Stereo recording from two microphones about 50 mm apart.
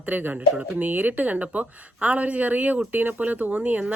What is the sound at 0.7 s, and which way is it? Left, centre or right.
Speech, right.